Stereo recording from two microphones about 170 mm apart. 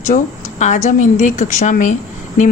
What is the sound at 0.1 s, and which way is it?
A woman's voice, 50° left (ahead or behind).